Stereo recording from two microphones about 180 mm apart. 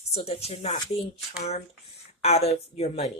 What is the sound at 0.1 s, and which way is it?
Speech, 35° left (ahead or behind).